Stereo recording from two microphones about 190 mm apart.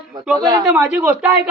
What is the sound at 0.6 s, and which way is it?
Speech, 5° right (ahead or behind).